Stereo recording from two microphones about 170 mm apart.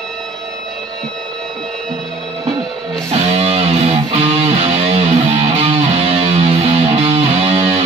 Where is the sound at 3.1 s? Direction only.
35° right (ahead or behind).